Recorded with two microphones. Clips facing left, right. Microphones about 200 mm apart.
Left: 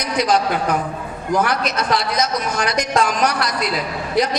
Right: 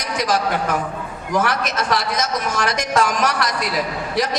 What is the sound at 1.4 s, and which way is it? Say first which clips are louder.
A man's voice: even; 45° right (ahead or behind).